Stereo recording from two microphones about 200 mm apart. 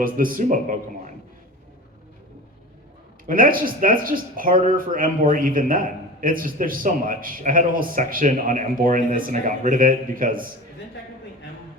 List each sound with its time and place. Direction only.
0.0 s speech: 45° right (ahead or behind)
3.2 s speech: 45° right (ahead or behind)